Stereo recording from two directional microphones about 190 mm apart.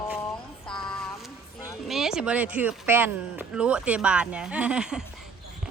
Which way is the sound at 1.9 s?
Centre (ahead or behind).